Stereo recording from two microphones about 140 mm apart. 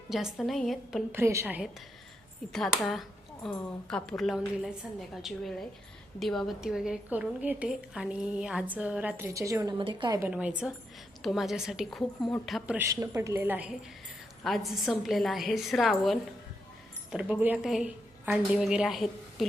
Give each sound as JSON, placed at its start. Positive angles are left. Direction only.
{"t": 0.1, "sound": "a woman's voice", "side_deg": 0}
{"t": 1.1, "sound": "a woman's voice", "side_deg": -20}
{"t": 2.5, "sound": "a woman's voice", "side_deg": 5}
{"t": 9.7, "sound": "a woman's voice", "side_deg": -35}
{"t": 10.2, "sound": "a woman's voice", "side_deg": -10}
{"t": 12.7, "sound": "a woman's voice", "side_deg": -20}
{"t": 14.4, "sound": "a woman's voice", "side_deg": 0}